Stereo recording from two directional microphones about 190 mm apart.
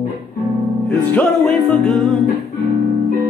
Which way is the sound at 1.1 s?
Centre (ahead or behind).